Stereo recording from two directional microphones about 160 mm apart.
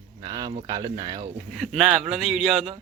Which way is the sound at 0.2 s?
25° right (ahead or behind).